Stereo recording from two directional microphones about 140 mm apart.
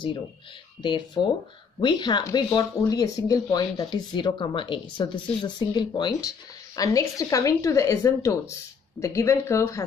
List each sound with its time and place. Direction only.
0.8 s speech: 35° left (ahead or behind)